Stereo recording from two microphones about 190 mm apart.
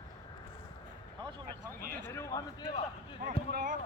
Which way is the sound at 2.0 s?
15° left (ahead or behind).